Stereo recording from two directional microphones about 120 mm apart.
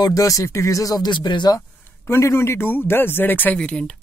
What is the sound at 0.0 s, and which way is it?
Speech, 30° left (ahead or behind).